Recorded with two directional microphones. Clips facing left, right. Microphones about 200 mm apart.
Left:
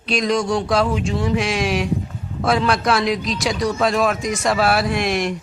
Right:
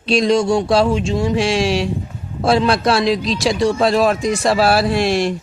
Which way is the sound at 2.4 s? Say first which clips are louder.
Right 3 dB; 30° right (ahead or behind).